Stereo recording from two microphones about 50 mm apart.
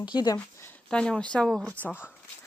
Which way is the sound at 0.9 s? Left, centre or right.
Centre.